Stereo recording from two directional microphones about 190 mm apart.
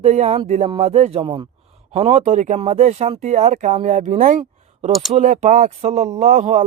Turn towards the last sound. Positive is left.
turn(degrees=-40)  # may be behind; listen again after turning